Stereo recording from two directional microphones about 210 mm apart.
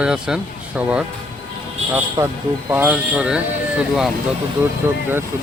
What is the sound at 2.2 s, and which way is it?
Speech, 15° right (ahead or behind).